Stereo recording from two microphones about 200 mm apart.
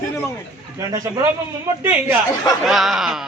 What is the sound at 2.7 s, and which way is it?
Speech, centre (ahead or behind).